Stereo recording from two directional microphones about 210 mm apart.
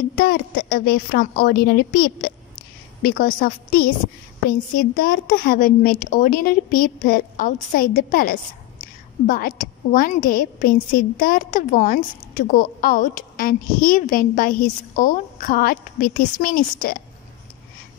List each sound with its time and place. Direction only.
0.2 s a woman's voice: 45° left (ahead or behind)